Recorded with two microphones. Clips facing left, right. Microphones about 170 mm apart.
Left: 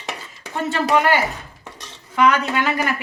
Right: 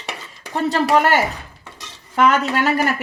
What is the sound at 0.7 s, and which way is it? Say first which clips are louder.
A woman's voice: right 1 dB; 45° right (ahead or behind).